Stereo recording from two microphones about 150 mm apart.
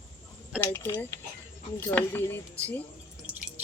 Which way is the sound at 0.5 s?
15° left (ahead or behind).